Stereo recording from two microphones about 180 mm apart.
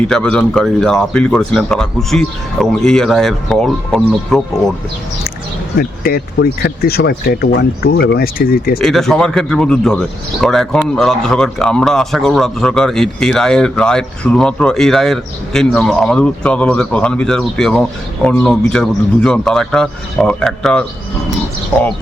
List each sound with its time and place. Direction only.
0.0 s speech: 5° left (ahead or behind)
5.7 s speech: 55° left (ahead or behind)
8.8 s speech: centre (ahead or behind)